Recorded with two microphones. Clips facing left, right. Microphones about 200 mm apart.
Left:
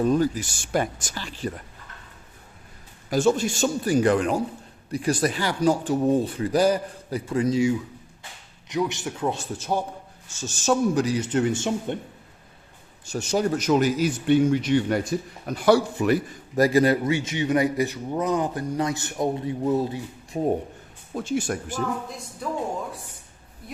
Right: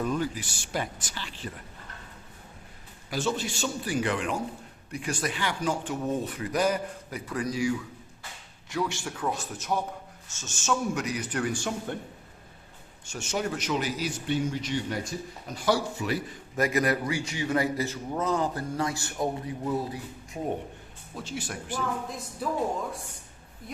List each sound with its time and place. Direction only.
0.0 s a man's voice: 40° left (ahead or behind)
3.1 s a man's voice: 45° left (ahead or behind); by 11.9 s 25° left (ahead or behind)
13.1 s a man's voice: 35° left (ahead or behind); by 16.1 s 60° left (ahead or behind)
16.6 s a man's voice: 30° left (ahead or behind)
21.2 s a man's voice: 50° left (ahead or behind)
22.4 s speech: 5° right (ahead or behind)